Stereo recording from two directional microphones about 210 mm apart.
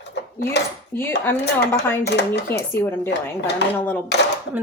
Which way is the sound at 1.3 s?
10° left (ahead or behind).